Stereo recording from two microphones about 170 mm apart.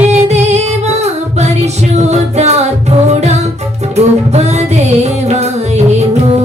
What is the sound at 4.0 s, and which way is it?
Music, 40° right (ahead or behind).